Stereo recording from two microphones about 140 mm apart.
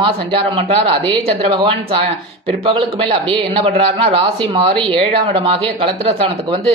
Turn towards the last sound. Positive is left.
turn(degrees=-45)  # may be behind; listen again after turning